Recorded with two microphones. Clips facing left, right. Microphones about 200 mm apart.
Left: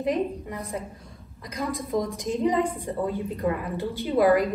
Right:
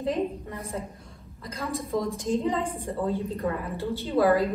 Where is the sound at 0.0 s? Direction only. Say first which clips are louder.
Left 2 dB; 15° left (ahead or behind).